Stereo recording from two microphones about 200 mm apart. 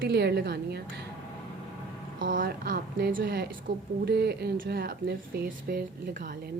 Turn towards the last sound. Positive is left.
turn(degrees=-45)  # may be behind; listen again after turning